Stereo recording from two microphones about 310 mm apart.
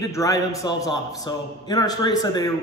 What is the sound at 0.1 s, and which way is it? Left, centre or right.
A man's voice, centre.